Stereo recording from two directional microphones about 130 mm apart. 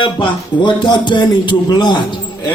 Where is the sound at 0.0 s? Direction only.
40° left (ahead or behind).